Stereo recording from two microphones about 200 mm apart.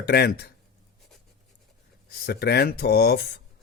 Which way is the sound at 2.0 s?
50° left (ahead or behind).